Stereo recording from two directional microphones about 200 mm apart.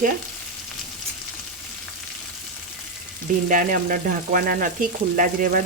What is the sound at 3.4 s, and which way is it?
Speech, 45° right (ahead or behind).